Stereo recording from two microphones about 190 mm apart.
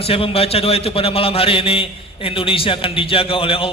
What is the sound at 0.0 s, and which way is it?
A man's voice, 30° left (ahead or behind).